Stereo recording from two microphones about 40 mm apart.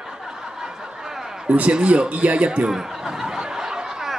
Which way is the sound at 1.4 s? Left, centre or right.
Right.